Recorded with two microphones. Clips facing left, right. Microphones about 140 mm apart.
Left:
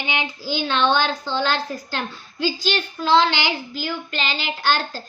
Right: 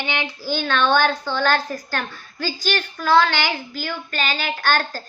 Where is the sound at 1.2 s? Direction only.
20° left (ahead or behind).